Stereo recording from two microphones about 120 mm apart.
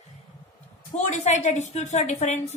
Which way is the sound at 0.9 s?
70° left (ahead or behind).